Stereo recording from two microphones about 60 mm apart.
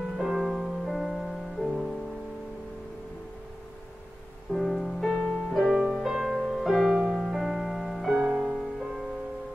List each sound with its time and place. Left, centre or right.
0.2 s music: centre
4.5 s music: centre
8.2 s music: centre
8.5 s music: centre